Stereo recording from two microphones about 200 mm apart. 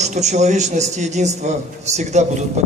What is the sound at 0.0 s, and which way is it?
A man's voice, 35° right (ahead or behind).